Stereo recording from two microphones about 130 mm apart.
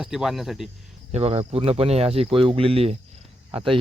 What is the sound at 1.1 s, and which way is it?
Speech, 50° right (ahead or behind).